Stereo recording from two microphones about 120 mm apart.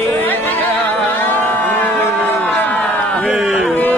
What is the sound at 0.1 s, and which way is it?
Music, 15° left (ahead or behind).